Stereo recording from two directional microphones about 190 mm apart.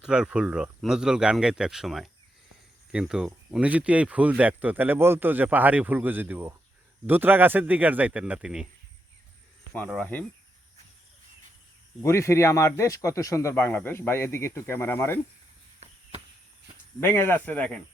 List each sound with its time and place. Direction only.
0.0 s speech: 5° right (ahead or behind)
9.7 s speech: 5° left (ahead or behind)
12.0 s speech: 15° left (ahead or behind)
17.0 s speech: 10° left (ahead or behind)